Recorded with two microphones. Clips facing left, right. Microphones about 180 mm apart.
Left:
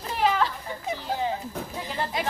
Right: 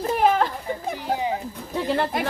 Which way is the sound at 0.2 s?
50° right (ahead or behind).